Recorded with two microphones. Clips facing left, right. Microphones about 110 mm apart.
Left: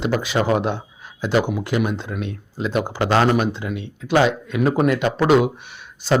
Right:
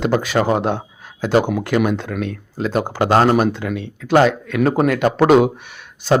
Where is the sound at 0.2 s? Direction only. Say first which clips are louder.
Right 2 dB; 45° right (ahead or behind).